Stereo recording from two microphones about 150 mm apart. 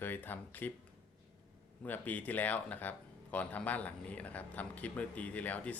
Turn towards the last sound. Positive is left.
turn(degrees=10)  # may be behind; listen again after turning